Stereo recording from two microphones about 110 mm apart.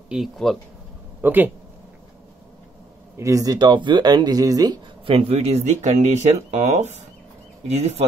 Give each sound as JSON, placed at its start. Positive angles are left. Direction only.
{"t": 0.1, "sound": "speech", "side_deg": 0}
{"t": 1.2, "sound": "speech", "side_deg": -20}
{"t": 3.2, "sound": "speech", "side_deg": -30}
{"t": 5.0, "sound": "speech", "side_deg": -60}